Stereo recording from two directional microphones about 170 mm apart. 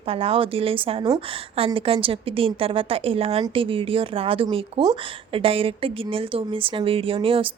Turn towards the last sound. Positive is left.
turn(degrees=-30)  # may be behind; listen again after turning